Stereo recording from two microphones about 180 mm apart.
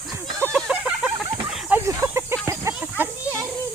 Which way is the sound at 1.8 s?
15° right (ahead or behind).